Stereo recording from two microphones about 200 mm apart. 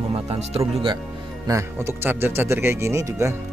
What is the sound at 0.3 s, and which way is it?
Speech, 30° right (ahead or behind).